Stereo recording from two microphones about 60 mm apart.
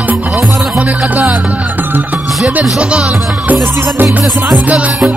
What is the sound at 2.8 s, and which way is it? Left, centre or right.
Speech, centre.